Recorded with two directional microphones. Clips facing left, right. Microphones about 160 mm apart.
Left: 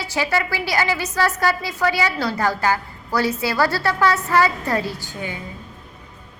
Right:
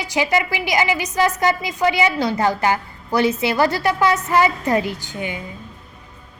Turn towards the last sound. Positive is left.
turn(degrees=-20)  # may be behind; listen again after turning